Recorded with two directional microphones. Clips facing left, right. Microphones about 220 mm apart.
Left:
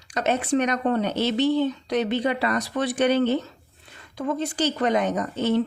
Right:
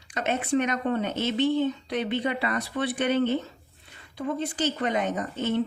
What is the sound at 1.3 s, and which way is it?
Speech, 75° left (ahead or behind).